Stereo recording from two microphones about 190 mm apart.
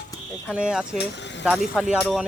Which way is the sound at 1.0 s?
65° left (ahead or behind).